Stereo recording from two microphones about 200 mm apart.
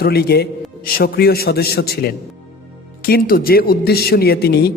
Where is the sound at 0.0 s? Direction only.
50° left (ahead or behind).